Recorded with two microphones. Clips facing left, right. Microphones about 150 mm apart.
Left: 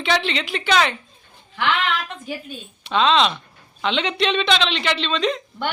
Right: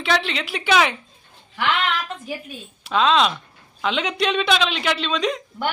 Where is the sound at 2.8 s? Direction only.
5° right (ahead or behind).